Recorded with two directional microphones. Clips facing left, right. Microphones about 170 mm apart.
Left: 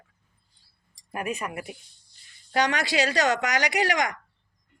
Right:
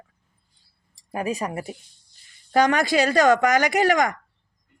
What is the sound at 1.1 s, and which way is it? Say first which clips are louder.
Speech: right 5 dB; 30° right (ahead or behind).